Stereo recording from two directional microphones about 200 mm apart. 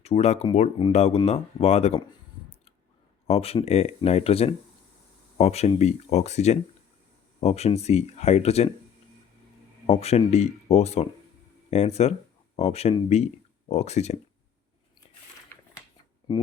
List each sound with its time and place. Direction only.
0.0 s speech: 30° left (ahead or behind)
3.2 s speech: 30° left (ahead or behind)
9.8 s speech: 30° left (ahead or behind)